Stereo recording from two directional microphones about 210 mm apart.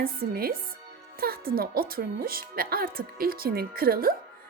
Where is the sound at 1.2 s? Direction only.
45° right (ahead or behind).